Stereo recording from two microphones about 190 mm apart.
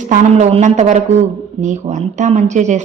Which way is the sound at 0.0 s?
40° right (ahead or behind).